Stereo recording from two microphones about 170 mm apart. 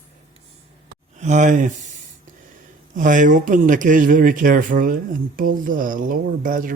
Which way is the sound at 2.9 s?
50° right (ahead or behind).